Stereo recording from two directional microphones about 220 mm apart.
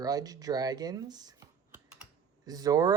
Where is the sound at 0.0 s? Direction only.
15° right (ahead or behind).